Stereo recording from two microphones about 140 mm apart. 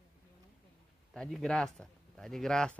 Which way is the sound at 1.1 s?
5° left (ahead or behind).